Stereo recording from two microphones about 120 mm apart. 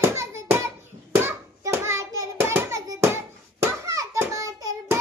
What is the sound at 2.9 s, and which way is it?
Bouncing, 20° right (ahead or behind).